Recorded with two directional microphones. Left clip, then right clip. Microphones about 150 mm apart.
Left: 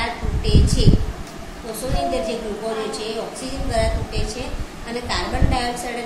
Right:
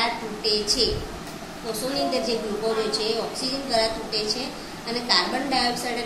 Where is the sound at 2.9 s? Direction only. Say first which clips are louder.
Right 1 dB; 20° left (ahead or behind).